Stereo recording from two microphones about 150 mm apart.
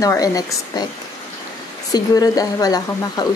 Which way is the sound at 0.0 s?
25° left (ahead or behind).